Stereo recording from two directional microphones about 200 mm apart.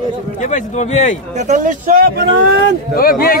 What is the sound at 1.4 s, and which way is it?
Speech, 40° right (ahead or behind).